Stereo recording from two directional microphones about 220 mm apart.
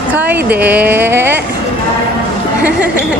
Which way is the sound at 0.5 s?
10° right (ahead or behind).